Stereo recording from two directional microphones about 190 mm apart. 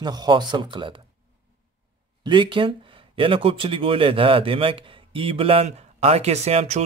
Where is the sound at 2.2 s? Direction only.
25° right (ahead or behind).